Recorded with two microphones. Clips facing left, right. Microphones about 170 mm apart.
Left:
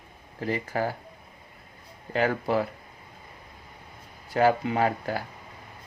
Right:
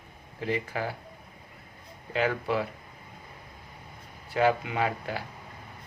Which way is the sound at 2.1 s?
40° left (ahead or behind).